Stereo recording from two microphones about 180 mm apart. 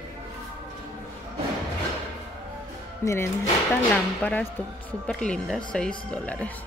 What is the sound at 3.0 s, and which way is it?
Speech, 15° left (ahead or behind).